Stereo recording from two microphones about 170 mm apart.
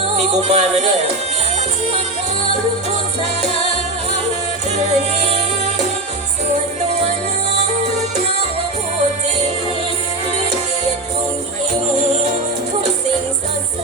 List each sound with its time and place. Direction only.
0.3 s speech: 40° right (ahead or behind)
4.9 s music: 40° right (ahead or behind)